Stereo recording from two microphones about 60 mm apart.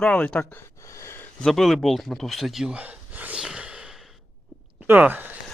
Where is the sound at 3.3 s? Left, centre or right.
Centre.